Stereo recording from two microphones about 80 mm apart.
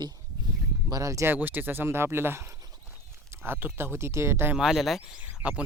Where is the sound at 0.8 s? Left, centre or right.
Right.